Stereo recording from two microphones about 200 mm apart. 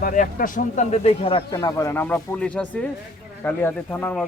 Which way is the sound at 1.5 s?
15° left (ahead or behind).